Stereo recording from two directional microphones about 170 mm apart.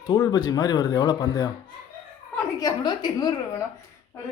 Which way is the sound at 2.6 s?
25° left (ahead or behind).